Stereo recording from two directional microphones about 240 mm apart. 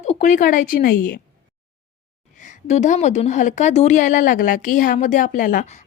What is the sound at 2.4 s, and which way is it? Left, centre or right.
A woman's voice, left.